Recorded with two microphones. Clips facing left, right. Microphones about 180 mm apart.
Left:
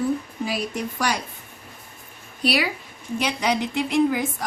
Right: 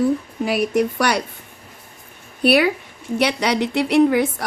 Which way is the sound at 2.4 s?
60° right (ahead or behind).